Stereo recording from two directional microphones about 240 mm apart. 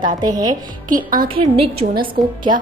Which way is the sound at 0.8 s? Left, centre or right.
Right.